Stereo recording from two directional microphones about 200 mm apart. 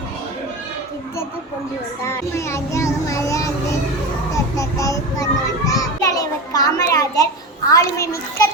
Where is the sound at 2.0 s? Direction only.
15° left (ahead or behind).